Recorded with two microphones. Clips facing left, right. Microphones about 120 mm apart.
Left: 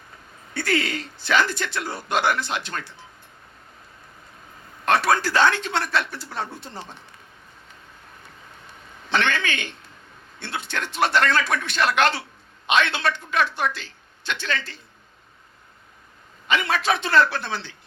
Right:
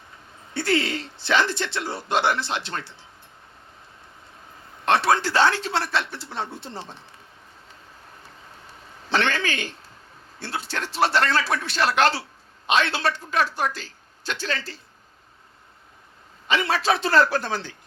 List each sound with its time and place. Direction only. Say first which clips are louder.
0.5 s speech: right 1 dB; 30° right (ahead or behind)
4.9 s speech: even; 25° right (ahead or behind)
8.2 s a sound: even; 35° right (ahead or behind)
10.4 s a man's voice: even; 35° right (ahead or behind)
16.5 s a man's voice: even; 30° right (ahead or behind)